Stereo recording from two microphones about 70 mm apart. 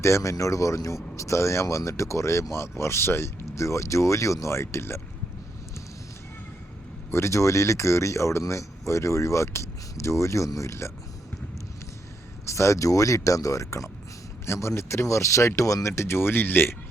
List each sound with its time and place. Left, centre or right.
0.0 s speech: left
7.1 s speech: left
12.5 s speech: left